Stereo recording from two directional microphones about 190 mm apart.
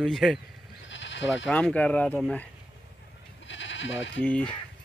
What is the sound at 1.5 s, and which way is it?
Speech, 5° left (ahead or behind).